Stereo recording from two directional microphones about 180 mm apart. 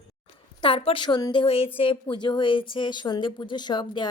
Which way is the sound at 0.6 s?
30° left (ahead or behind).